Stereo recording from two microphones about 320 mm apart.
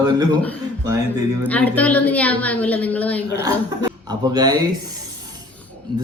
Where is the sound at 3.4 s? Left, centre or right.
Centre.